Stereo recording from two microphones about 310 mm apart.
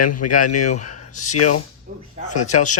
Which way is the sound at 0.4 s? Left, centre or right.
Left.